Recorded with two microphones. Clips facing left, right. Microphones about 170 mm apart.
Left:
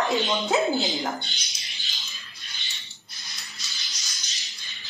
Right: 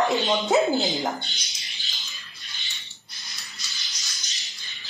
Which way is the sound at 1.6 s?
Centre (ahead or behind).